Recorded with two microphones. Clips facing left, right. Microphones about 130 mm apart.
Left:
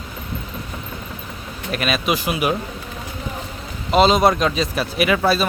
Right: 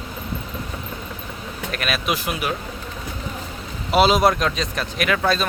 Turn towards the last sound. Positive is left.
turn(degrees=5)  # may be behind; listen again after turning